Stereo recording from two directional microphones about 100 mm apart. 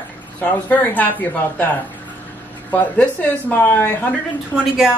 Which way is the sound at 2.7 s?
15° left (ahead or behind).